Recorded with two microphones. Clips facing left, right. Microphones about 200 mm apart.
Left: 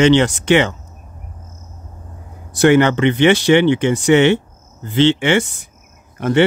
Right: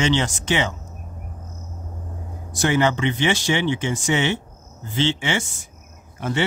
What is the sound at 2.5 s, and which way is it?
Speech, 65° left (ahead or behind).